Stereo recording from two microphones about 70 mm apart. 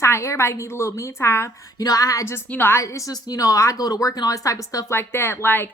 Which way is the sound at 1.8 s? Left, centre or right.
Left.